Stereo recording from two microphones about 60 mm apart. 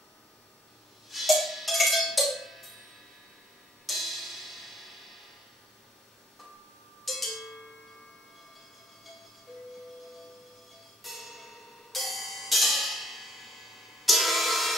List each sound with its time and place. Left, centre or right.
1.1 s cowbell: centre
3.8 s cymbal: centre
7.1 s cowbell: centre
11.0 s music: centre